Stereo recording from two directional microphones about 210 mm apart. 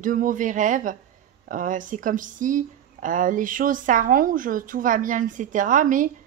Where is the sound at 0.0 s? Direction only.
40° right (ahead or behind).